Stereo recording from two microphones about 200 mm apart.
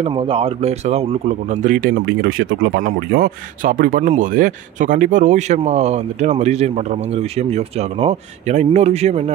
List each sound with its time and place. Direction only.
0.0 s speech: 30° right (ahead or behind)
2.0 s speech: 55° right (ahead or behind); by 9.3 s 30° right (ahead or behind)